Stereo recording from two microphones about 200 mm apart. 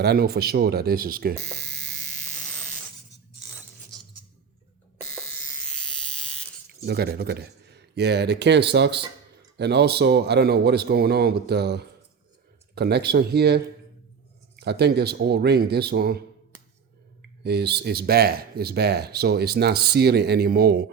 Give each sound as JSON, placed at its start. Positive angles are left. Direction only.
{"t": 0.0, "sound": "speech", "side_deg": -50}
{"t": 1.4, "sound": "speech", "side_deg": 5}
{"t": 2.3, "sound": "electric shaver", "side_deg": 5}
{"t": 5.3, "sound": "electric shaver", "side_deg": 5}
{"t": 6.8, "sound": "speech", "side_deg": -50}
{"t": 17.4, "sound": "speech", "side_deg": -55}